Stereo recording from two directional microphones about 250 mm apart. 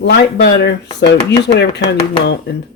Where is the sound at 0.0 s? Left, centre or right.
Left.